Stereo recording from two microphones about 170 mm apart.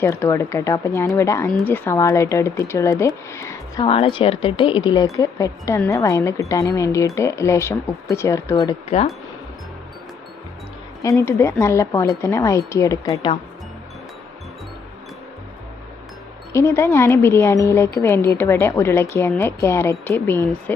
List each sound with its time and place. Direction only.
0.0 s a woman's voice: 15° left (ahead or behind)
3.8 s a woman's voice: 35° left (ahead or behind)
8.9 s speech: 40° left (ahead or behind)
11.0 s a woman's voice: 20° left (ahead or behind)
16.5 s a woman's voice: 15° left (ahead or behind)